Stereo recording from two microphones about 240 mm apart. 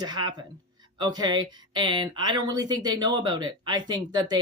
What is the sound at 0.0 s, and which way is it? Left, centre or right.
Speech, centre.